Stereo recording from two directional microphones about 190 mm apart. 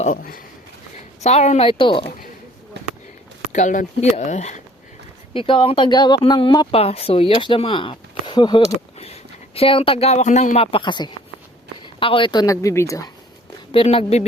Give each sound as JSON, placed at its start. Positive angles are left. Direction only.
{"t": 0.0, "sound": "speech", "side_deg": 45}
{"t": 1.2, "sound": "speech", "side_deg": 35}
{"t": 3.5, "sound": "speech", "side_deg": 40}
{"t": 5.3, "sound": "speech", "side_deg": 25}
{"t": 13.7, "sound": "speech", "side_deg": 30}